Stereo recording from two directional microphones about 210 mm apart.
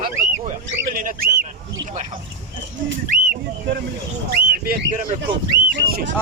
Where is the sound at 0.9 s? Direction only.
40° right (ahead or behind).